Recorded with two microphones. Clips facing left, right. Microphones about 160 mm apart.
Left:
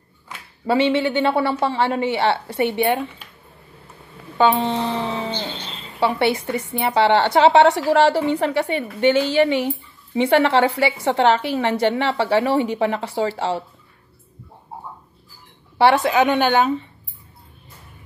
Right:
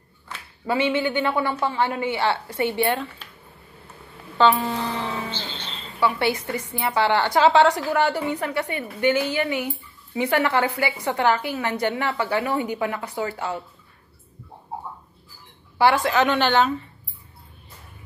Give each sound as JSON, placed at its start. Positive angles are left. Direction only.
{"t": 0.7, "sound": "a woman's voice", "side_deg": 25}
{"t": 4.4, "sound": "a woman's voice", "side_deg": 20}
{"t": 15.8, "sound": "a woman's voice", "side_deg": 20}